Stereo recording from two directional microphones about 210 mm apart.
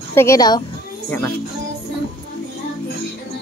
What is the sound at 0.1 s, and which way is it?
Speech, 15° left (ahead or behind).